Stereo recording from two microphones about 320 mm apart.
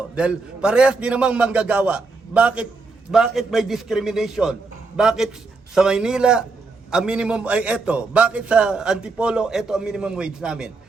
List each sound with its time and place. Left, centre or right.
0.2 s a man's voice: centre